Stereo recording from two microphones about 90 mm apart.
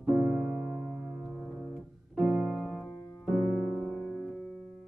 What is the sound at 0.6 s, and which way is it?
Music, 10° right (ahead or behind).